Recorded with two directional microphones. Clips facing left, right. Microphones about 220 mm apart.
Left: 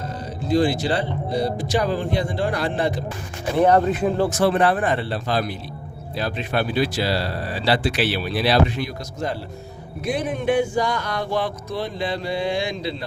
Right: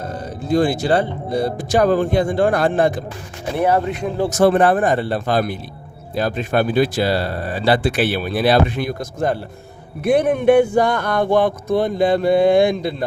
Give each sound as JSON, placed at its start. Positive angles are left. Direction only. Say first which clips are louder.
{"t": 0.0, "sound": "speech", "louder": "right 3 dB", "side_deg": -50}
{"t": 3.6, "sound": "speech", "louder": "left 2 dB", "side_deg": -5}
{"t": 4.3, "sound": "speech", "louder": "right 5 dB", "side_deg": -50}